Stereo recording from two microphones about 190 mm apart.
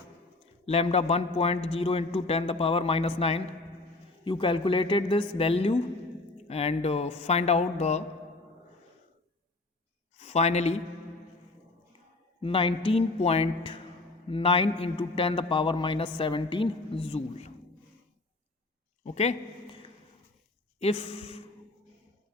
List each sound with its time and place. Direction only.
0.6 s a man's voice: 35° left (ahead or behind)
10.2 s speech: 35° left (ahead or behind)
12.4 s a man's voice: 30° left (ahead or behind)
19.0 s a sound: 35° left (ahead or behind)
20.7 s speech: 30° left (ahead or behind)